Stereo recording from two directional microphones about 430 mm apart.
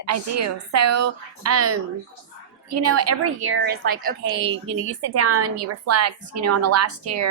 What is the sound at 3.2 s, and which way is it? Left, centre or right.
Speech, right.